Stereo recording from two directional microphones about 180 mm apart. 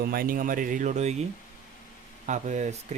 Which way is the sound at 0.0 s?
55° right (ahead or behind).